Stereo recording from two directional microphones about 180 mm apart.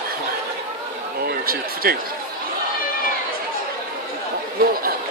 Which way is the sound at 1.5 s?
55° right (ahead or behind).